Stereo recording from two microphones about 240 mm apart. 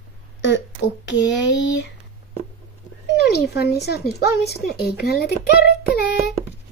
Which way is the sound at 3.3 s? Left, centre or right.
Left.